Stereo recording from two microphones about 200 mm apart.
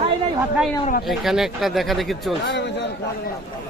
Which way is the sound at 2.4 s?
60° left (ahead or behind).